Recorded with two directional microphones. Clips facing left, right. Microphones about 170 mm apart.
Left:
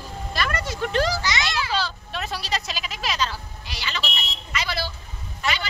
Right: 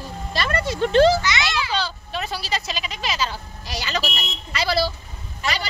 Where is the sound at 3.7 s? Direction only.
40° right (ahead or behind).